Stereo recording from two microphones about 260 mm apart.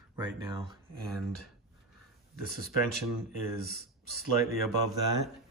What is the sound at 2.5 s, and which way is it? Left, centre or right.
Speech, centre.